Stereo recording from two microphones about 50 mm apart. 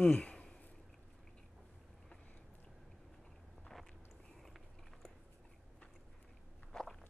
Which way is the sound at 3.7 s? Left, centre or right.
Centre.